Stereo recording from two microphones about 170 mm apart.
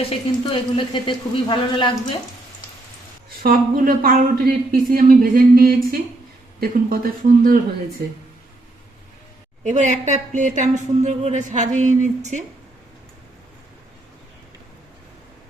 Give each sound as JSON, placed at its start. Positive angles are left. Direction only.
{"t": 0.5, "sound": "speech", "side_deg": 30}
{"t": 3.2, "sound": "a woman's voice", "side_deg": -60}
{"t": 9.6, "sound": "a woman's voice", "side_deg": -45}